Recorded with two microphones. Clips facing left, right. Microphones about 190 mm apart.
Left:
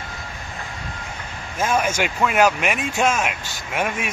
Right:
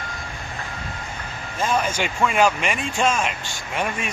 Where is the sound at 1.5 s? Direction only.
5° left (ahead or behind).